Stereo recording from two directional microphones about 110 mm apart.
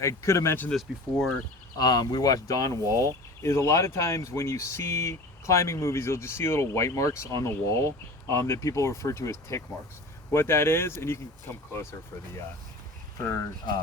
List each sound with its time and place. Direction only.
0.0 s speech: 25° left (ahead or behind)
1.8 s speech: 40° left (ahead or behind); by 11.9 s 25° left (ahead or behind)
13.1 s speech: 30° left (ahead or behind)